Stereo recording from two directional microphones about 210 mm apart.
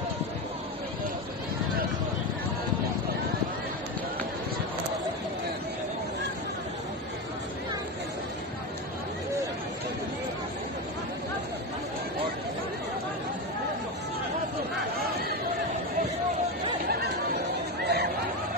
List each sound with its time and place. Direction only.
17.8 s chatter: 50° right (ahead or behind)